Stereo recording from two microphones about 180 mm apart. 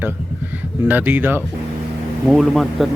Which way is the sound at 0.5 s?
10° right (ahead or behind).